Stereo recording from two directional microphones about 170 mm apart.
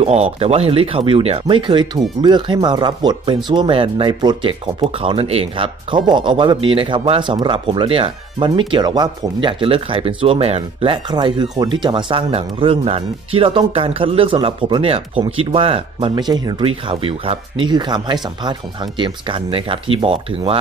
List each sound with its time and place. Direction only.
0.0 s speech: 35° right (ahead or behind)